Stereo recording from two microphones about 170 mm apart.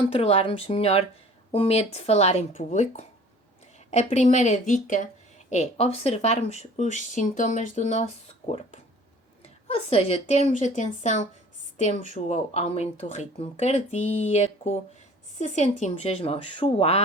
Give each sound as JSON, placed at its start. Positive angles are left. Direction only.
{"t": 0.0, "sound": "speech", "side_deg": 35}